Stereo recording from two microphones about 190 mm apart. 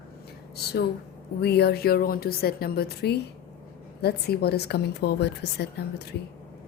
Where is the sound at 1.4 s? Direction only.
60° left (ahead or behind).